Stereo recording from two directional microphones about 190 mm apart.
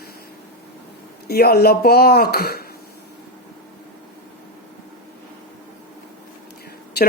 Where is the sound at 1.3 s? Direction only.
55° left (ahead or behind).